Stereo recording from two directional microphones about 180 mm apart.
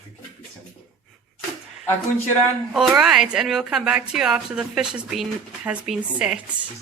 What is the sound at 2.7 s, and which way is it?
A woman's voice, 5° right (ahead or behind).